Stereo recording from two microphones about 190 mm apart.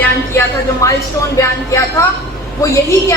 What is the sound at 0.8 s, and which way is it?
A woman's voice, 15° left (ahead or behind).